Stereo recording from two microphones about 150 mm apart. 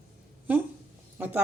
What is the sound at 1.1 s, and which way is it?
Speech, 15° right (ahead or behind).